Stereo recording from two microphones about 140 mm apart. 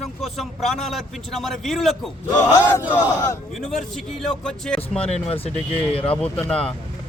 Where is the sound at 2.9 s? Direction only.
20° left (ahead or behind).